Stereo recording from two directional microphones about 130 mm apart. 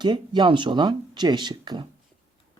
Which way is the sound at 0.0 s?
35° right (ahead or behind).